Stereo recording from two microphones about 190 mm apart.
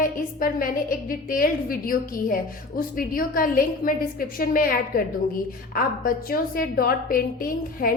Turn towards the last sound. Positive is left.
turn(degrees=50)  # may be behind; listen again after turning